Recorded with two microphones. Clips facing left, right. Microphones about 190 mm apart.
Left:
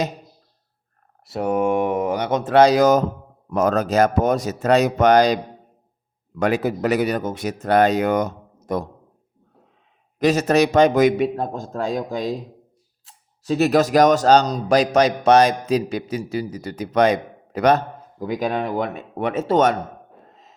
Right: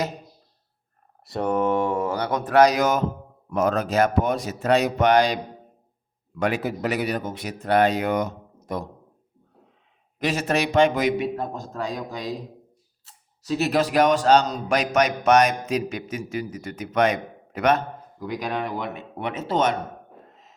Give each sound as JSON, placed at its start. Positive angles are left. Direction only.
{"t": 1.2, "sound": "speech", "side_deg": 5}
{"t": 6.4, "sound": "speech", "side_deg": 40}
{"t": 10.2, "sound": "speech", "side_deg": 40}
{"t": 13.6, "sound": "speech", "side_deg": 45}
{"t": 20.3, "sound": "a sound", "side_deg": 35}